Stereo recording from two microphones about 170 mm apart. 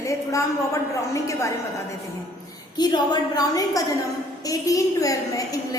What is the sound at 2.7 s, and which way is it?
A woman's voice, 25° left (ahead or behind).